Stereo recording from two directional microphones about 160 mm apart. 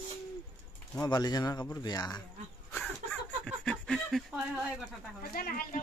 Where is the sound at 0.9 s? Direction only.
25° left (ahead or behind).